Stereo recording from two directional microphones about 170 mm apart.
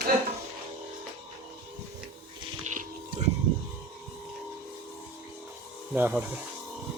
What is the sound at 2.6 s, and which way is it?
Music, 50° right (ahead or behind).